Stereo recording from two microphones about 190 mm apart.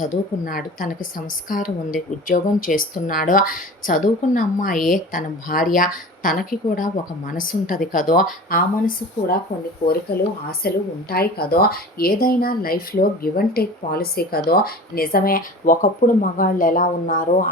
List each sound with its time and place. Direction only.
0.0 s speech: 45° left (ahead or behind)
10.6 s speech: 55° left (ahead or behind)